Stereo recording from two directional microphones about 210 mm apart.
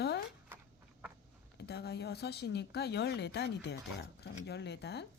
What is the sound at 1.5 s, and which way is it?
Speech, 50° left (ahead or behind).